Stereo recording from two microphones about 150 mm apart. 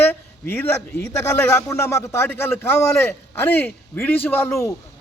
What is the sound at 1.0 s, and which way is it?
A man's voice, 20° left (ahead or behind).